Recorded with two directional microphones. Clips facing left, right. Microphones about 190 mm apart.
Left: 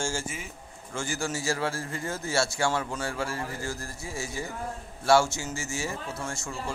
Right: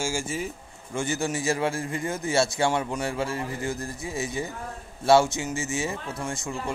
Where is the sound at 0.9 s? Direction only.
20° right (ahead or behind).